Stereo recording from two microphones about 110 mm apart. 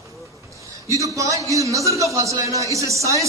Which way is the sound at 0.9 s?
30° right (ahead or behind).